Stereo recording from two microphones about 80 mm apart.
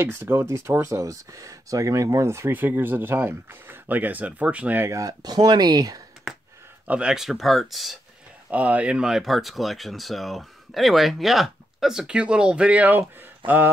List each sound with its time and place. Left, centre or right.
0.0 s speech: right
2.5 s speech: right
4.8 s speech: right
6.9 s speech: centre
8.5 s speech: centre